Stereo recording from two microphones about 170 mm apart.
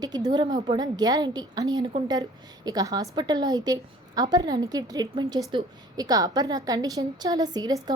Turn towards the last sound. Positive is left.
turn(degrees=-25)  # may be behind; listen again after turning